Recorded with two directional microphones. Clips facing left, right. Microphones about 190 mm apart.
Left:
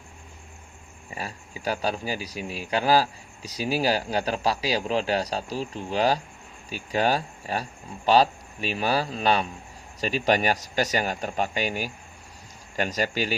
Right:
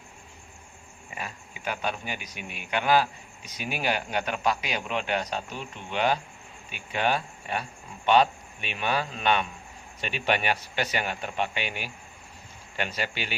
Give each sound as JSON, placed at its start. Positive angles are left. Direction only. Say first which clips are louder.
{"t": 1.1, "sound": "a man's voice", "louder": "left 3 dB", "side_deg": 35}